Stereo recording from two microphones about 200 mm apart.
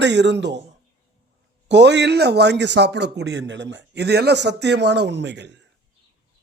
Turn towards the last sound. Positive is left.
turn(degrees=-60)  # may be behind; listen again after turning